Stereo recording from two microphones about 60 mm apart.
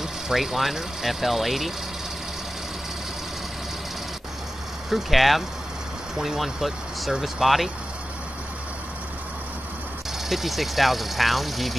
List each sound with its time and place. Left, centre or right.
0.0 s speech: centre
4.8 s speech: centre
10.3 s speech: centre